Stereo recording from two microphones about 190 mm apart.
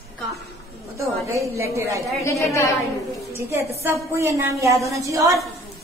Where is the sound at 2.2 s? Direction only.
15° left (ahead or behind).